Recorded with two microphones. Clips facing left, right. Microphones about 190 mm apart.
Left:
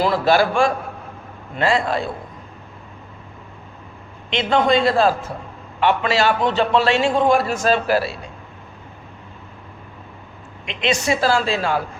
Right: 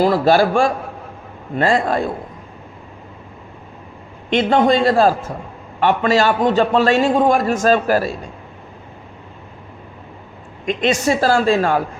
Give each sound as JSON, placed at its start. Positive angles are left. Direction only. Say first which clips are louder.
{"t": 0.0, "sound": "a man's voice", "louder": "right 3 dB", "side_deg": -40}
{"t": 4.3, "sound": "a man's voice", "louder": "right 3 dB", "side_deg": -45}
{"t": 10.7, "sound": "a man's voice", "louder": "right 4 dB", "side_deg": -45}